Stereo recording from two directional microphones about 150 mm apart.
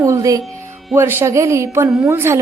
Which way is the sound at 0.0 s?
20° right (ahead or behind).